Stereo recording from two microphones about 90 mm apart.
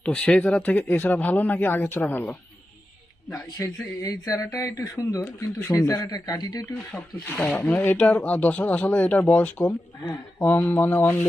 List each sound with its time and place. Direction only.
0.0 s speech: 10° left (ahead or behind)
3.3 s speech: 35° left (ahead or behind)
5.2 s speech: 25° left (ahead or behind)
6.0 s speech: 45° left (ahead or behind)
7.3 s speech: 20° left (ahead or behind)
11.0 s speech: 35° left (ahead or behind)